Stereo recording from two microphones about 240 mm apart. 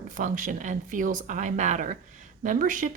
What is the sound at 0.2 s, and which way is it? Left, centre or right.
A woman's voice, right.